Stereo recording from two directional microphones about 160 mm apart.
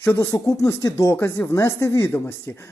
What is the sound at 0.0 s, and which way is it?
Speech, 15° left (ahead or behind).